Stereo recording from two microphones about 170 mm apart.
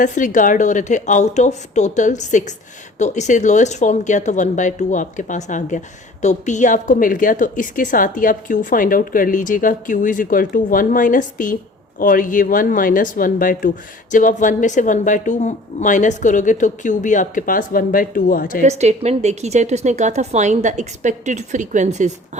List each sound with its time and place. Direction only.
0.0 s speech: 50° left (ahead or behind)
18.6 s a woman's voice: 40° right (ahead or behind)